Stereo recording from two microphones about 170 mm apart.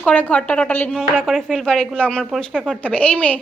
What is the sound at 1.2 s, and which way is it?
A woman's voice, centre (ahead or behind).